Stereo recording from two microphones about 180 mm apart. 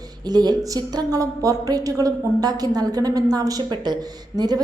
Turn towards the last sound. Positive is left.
turn(degrees=-20)  # may be behind; listen again after turning